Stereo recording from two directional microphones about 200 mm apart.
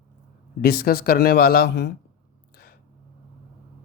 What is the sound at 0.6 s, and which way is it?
Speech, 50° left (ahead or behind).